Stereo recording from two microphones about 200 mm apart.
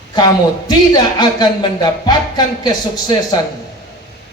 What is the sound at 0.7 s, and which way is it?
Music, 20° left (ahead or behind).